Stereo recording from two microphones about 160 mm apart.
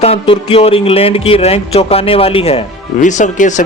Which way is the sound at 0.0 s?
35° left (ahead or behind).